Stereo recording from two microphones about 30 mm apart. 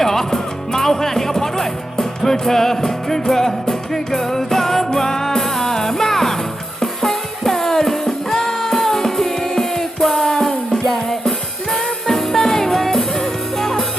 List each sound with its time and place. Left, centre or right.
0.0 s music: centre